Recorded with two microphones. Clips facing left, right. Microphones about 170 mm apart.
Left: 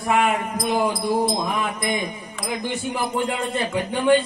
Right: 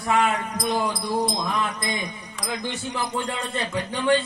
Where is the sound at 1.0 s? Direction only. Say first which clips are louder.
Left 3 dB; 25° left (ahead or behind).